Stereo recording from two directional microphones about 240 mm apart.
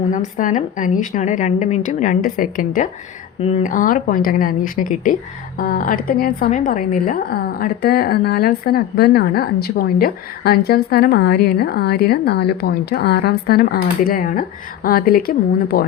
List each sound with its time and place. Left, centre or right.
0.1 s a woman's voice: left